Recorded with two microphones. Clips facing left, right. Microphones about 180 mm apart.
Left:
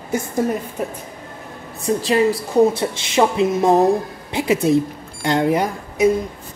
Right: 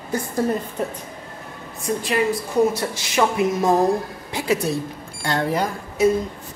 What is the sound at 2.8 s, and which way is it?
Speech, 25° left (ahead or behind).